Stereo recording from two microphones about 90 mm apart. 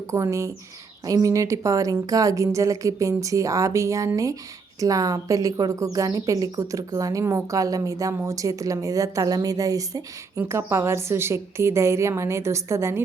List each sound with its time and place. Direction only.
0.1 s speech: 35° right (ahead or behind)